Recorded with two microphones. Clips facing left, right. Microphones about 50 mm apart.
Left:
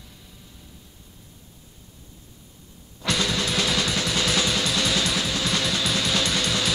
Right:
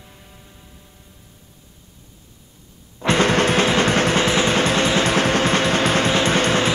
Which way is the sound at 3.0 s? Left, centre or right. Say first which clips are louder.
Right 8 dB; right.